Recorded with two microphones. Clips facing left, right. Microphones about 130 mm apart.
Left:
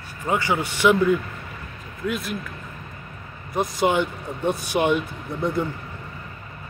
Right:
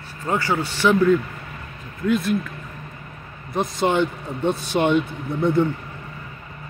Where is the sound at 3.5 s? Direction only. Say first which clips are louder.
Even; 10° left (ahead or behind).